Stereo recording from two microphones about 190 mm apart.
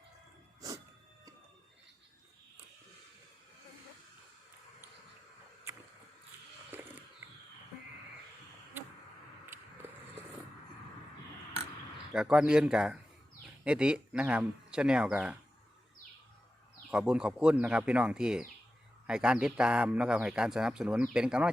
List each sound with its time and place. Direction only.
12.1 s a man's voice: 5° right (ahead or behind)
16.9 s a man's voice: 5° right (ahead or behind)